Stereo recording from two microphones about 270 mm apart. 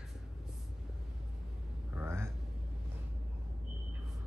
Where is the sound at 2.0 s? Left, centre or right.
Centre.